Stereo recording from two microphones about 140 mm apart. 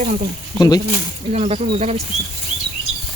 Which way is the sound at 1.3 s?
55° right (ahead or behind).